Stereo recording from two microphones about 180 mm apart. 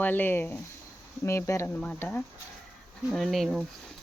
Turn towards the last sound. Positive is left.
turn(degrees=0)  # may be behind; listen again after turning